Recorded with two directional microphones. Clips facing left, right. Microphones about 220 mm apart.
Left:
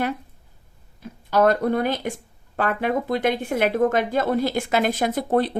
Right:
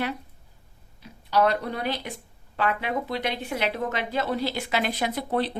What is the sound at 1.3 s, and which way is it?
Speech, 50° left (ahead or behind).